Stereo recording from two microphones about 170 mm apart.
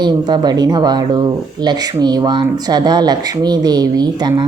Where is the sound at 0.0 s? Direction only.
25° right (ahead or behind).